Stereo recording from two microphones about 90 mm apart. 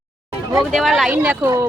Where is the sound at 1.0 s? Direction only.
15° right (ahead or behind).